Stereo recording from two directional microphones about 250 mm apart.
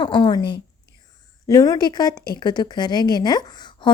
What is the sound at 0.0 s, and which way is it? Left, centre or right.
A woman's voice, centre.